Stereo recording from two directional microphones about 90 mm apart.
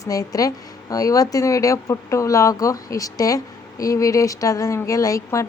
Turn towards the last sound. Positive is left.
turn(degrees=40)  # may be behind; listen again after turning